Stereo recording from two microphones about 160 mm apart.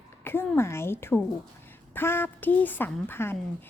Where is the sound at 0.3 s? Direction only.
15° left (ahead or behind).